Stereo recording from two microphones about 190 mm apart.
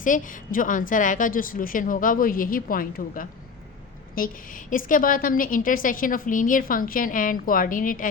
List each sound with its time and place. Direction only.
0.0 s a woman's voice: 45° left (ahead or behind)